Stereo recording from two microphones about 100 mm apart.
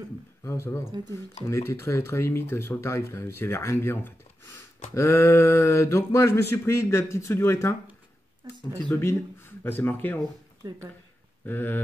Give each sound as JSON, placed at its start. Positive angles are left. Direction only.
{"t": 0.4, "sound": "speech", "side_deg": 25}
{"t": 8.9, "sound": "speech", "side_deg": 20}
{"t": 10.6, "sound": "speech", "side_deg": -40}
{"t": 11.4, "sound": "speech", "side_deg": 20}